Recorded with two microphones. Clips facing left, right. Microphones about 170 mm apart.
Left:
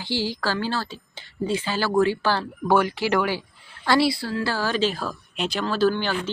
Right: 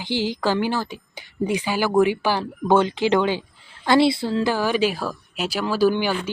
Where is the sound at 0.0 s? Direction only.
20° right (ahead or behind).